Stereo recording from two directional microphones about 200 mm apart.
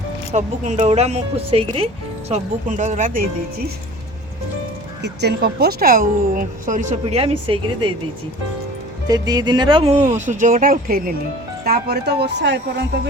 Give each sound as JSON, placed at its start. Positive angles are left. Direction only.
{"t": 0.3, "sound": "a woman's voice", "side_deg": -35}
{"t": 5.2, "sound": "a woman's voice", "side_deg": -55}
{"t": 9.0, "sound": "a woman's voice", "side_deg": -20}